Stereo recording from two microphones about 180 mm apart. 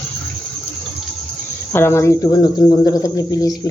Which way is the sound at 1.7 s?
15° left (ahead or behind).